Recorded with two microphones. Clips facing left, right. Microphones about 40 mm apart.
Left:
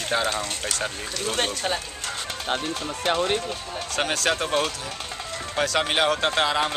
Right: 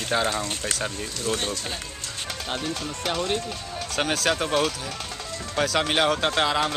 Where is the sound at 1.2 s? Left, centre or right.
Left.